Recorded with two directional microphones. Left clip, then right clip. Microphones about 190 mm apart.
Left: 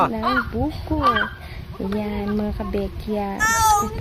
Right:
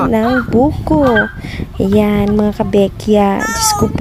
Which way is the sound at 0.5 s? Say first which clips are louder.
Right 14 dB; 50° right (ahead or behind).